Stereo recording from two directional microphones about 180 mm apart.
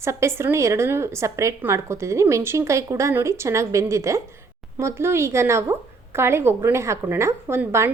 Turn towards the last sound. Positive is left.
turn(degrees=-15)  # may be behind; listen again after turning